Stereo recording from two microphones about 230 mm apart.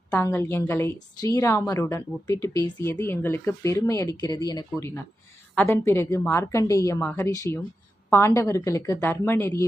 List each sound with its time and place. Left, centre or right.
0.1 s a woman's voice: centre